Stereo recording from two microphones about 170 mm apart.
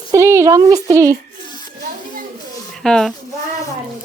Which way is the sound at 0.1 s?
15° right (ahead or behind).